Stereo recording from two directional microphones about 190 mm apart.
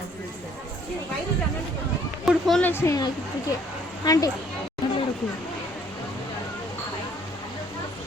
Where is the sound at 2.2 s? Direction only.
Centre (ahead or behind).